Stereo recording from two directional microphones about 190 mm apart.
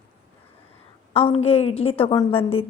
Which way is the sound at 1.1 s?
30° left (ahead or behind).